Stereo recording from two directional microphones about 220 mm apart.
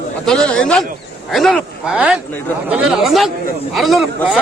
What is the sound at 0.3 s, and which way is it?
Speech, 5° left (ahead or behind).